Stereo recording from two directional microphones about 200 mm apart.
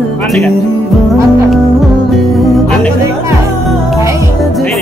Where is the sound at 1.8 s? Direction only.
Centre (ahead or behind).